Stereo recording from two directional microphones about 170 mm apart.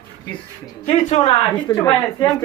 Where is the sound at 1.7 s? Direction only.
20° left (ahead or behind).